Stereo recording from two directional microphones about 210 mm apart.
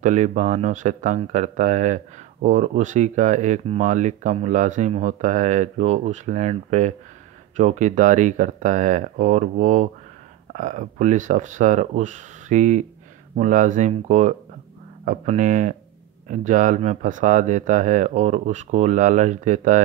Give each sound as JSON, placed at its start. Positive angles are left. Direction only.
{"t": 0.0, "sound": "speech", "side_deg": -35}